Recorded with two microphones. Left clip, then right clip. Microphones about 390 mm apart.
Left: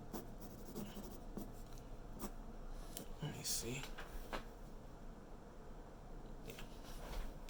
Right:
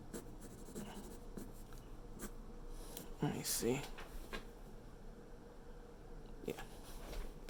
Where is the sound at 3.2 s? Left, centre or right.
Centre.